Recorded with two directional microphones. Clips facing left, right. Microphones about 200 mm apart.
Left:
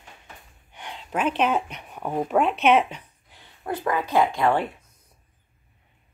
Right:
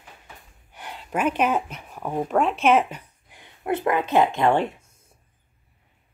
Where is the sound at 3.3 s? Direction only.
15° right (ahead or behind).